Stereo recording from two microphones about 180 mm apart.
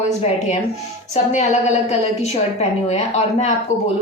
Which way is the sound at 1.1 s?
40° left (ahead or behind).